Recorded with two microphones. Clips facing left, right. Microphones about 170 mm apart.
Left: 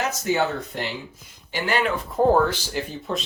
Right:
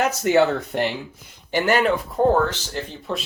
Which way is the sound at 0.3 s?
65° right (ahead or behind).